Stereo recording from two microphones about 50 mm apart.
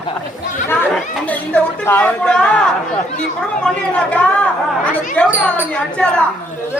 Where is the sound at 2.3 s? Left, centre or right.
Centre.